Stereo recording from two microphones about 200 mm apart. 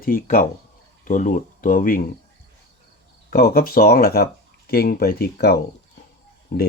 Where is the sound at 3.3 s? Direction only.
45° left (ahead or behind).